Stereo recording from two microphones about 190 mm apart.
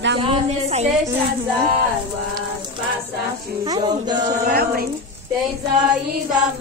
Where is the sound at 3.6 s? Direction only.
20° right (ahead or behind).